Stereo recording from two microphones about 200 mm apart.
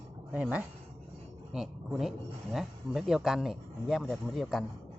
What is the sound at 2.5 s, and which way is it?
Speech, centre (ahead or behind).